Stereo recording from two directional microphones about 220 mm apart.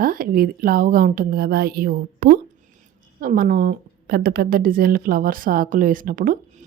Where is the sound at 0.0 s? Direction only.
40° right (ahead or behind).